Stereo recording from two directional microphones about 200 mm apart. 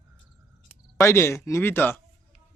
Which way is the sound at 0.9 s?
15° left (ahead or behind).